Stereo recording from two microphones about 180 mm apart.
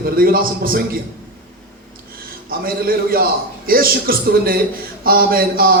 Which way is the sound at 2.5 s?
55° right (ahead or behind).